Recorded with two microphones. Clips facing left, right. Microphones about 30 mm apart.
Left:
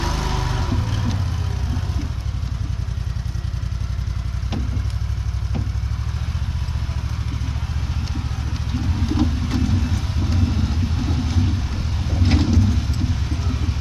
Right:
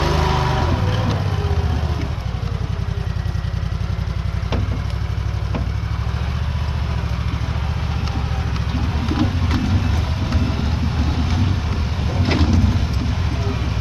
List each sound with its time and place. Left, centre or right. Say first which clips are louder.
0.0 s vehicle: right 6 dB; right
12.1 s vehicle: right 1 dB; centre